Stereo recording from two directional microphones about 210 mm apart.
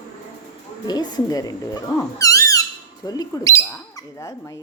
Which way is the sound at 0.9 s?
20° left (ahead or behind).